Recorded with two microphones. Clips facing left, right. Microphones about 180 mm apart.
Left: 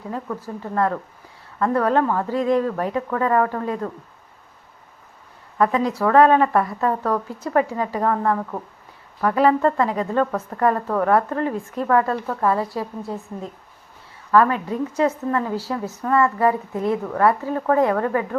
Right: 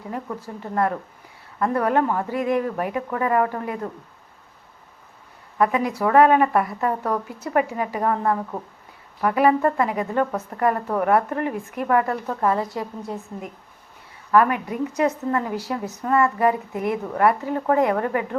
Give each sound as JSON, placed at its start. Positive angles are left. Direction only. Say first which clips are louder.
{"t": 0.6, "sound": "a woman's voice", "louder": "left 1 dB", "side_deg": -20}
{"t": 5.5, "sound": "a woman's voice", "louder": "left 1 dB", "side_deg": -10}
{"t": 14.3, "sound": "a woman's voice", "louder": "left 1 dB", "side_deg": -15}